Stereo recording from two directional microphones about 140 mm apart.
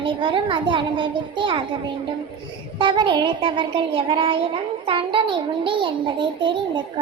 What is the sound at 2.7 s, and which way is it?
A child's voice, 35° right (ahead or behind).